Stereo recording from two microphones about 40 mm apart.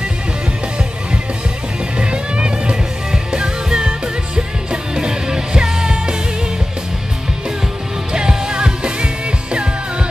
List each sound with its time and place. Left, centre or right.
2.0 s music: right
4.9 s music: centre
8.1 s music: centre